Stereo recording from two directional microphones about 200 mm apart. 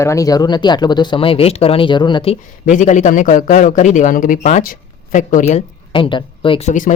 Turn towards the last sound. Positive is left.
turn(degrees=40)  # may be behind; listen again after turning